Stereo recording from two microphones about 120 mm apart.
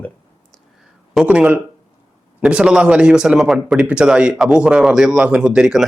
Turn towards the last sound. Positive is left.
turn(degrees=-5)  # may be behind; listen again after turning